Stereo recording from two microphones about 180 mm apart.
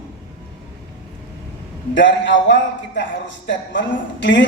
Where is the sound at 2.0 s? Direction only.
80° left.